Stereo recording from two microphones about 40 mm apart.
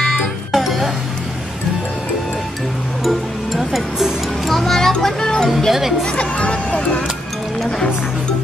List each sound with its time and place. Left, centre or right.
0.2 s music: centre
3.0 s music: centre
5.7 s speech: centre
6.1 s speech: left